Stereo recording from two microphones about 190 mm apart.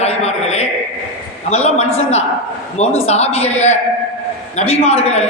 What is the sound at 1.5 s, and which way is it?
A man's voice, 35° left (ahead or behind).